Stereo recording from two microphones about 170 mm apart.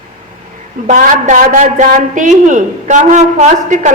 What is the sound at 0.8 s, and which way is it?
A woman's voice, 45° right (ahead or behind).